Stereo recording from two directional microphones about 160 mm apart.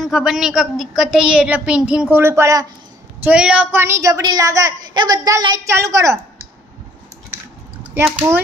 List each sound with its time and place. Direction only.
0.0 s speech: 5° right (ahead or behind)
3.3 s a woman's voice: 5° right (ahead or behind)
7.9 s speech: 15° right (ahead or behind)